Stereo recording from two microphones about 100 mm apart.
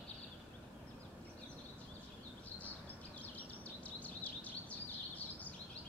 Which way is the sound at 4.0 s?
15° left (ahead or behind).